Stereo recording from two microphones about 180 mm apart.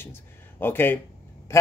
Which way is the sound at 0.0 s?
10° left (ahead or behind).